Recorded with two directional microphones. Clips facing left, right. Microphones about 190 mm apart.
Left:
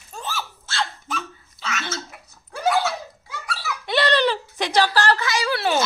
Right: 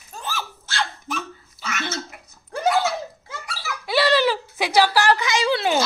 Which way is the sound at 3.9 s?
5° right (ahead or behind).